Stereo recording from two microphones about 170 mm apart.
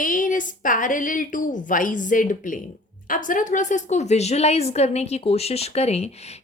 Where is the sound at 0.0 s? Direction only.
50° left (ahead or behind).